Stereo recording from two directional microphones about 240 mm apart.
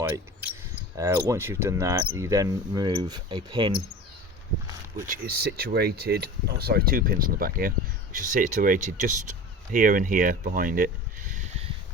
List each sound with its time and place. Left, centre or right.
0.9 s speech: centre
5.0 s speech: right
11.3 s a sound: right